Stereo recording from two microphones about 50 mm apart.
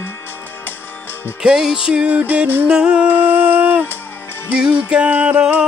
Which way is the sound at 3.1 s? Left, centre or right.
Right.